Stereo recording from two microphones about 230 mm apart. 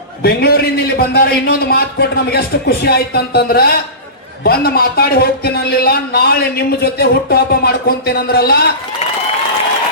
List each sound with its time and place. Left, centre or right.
0.2 s a man's voice: left